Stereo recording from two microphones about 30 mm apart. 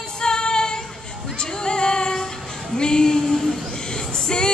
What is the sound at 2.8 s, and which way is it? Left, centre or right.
Speech, left.